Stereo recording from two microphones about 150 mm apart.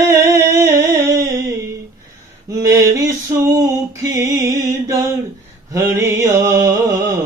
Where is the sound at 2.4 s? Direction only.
20° right (ahead or behind).